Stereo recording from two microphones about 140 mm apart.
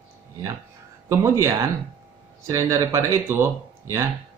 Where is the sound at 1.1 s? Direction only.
20° right (ahead or behind).